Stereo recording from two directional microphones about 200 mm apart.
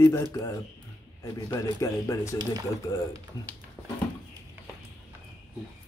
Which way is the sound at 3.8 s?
10° left (ahead or behind).